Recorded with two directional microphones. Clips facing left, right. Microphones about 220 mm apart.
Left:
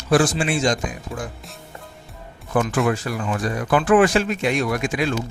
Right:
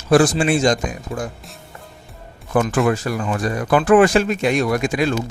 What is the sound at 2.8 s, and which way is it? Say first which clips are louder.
Speech: right 3 dB; 40° right (ahead or behind).